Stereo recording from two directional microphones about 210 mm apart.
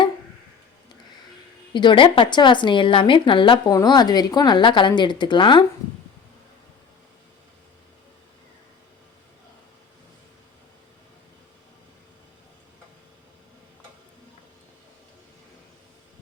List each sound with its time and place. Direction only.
1.7 s a woman's voice: 20° left (ahead or behind)